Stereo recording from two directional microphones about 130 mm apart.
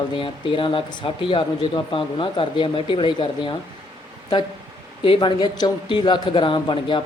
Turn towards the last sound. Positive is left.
turn(degrees=35)  # may be behind; listen again after turning